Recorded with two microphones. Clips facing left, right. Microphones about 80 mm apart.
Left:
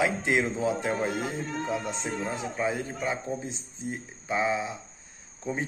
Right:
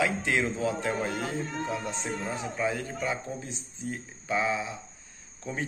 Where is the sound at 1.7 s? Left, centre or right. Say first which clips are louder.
Left 2 dB; left.